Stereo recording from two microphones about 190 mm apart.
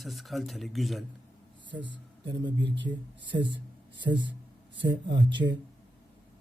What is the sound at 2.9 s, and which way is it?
Speech, 25° right (ahead or behind).